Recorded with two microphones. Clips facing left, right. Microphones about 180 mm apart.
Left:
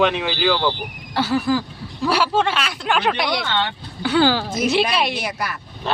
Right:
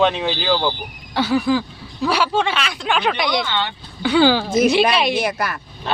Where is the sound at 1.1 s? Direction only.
5° left (ahead or behind).